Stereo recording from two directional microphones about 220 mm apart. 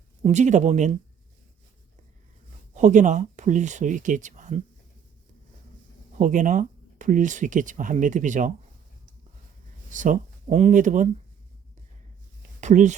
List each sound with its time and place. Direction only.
0.2 s speech: 30° right (ahead or behind)
2.7 s speech: 35° right (ahead or behind)
6.1 s speech: 35° right (ahead or behind)
9.9 s speech: 35° right (ahead or behind)
12.5 s a sound: 35° right (ahead or behind)